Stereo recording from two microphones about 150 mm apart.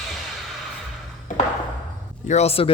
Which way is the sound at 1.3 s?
60° left (ahead or behind).